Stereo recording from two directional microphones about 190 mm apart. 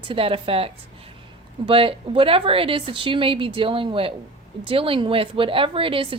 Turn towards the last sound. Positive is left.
turn(degrees=-30)  # may be behind; listen again after turning